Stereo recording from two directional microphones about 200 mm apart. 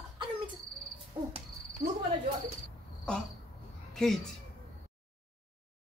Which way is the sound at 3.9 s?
Centre (ahead or behind).